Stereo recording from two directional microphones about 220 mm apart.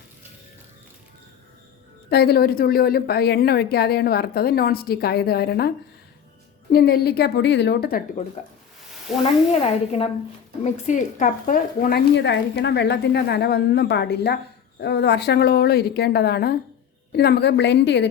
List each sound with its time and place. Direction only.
2.0 s speech: 45° left (ahead or behind)
9.5 s a woman's voice: 30° left (ahead or behind); by 18.1 s 50° left (ahead or behind)